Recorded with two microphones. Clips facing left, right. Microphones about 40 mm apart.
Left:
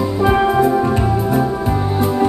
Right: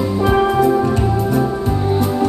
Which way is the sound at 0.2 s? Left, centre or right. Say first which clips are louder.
Left 1 dB; centre.